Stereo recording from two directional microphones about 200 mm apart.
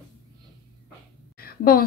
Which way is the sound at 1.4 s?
50° left (ahead or behind).